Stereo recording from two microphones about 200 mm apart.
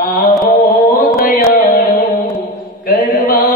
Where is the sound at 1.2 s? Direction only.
45° left (ahead or behind).